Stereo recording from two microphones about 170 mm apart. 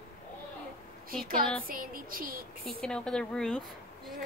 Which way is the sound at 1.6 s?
55° right (ahead or behind).